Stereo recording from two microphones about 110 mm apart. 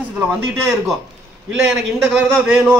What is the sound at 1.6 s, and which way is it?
A man's voice, 10° right (ahead or behind).